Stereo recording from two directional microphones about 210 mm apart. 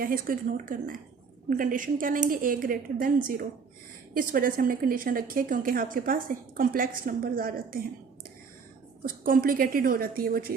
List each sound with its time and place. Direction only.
0.0 s a woman's voice: 40° right (ahead or behind)
9.0 s a woman's voice: 40° right (ahead or behind)